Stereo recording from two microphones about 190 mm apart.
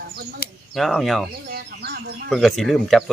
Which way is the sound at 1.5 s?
55° right (ahead or behind).